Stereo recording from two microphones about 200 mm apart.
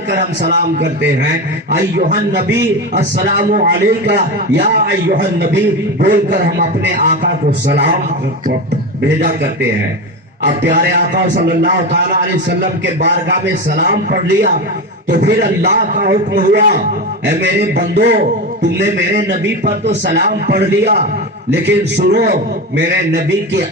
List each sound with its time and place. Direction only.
0.1 s a man's voice: 55° right (ahead or behind)
1.7 s a man's voice: 45° right (ahead or behind)
2.9 s a man's voice: 60° right (ahead or behind)
3.2 s a man's voice: 45° right (ahead or behind)
4.0 s a man's voice: 55° right (ahead or behind)
9.0 s a man's voice: 60° right (ahead or behind)
11.1 s a man's voice: 50° right (ahead or behind)
13.7 s a man's voice: 45° right (ahead or behind)
17.2 s a man's voice: 55° right (ahead or behind)